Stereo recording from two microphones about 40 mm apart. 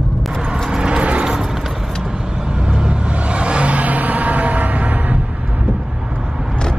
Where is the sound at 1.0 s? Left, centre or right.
Right.